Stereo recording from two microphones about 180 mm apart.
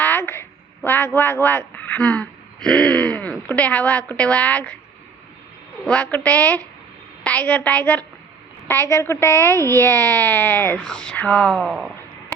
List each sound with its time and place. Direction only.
0.0 s speech: 10° left (ahead or behind)
5.8 s speech: 5° left (ahead or behind)
9.6 s a child's voice: 20° right (ahead or behind)
10.0 s speech: 10° left (ahead or behind)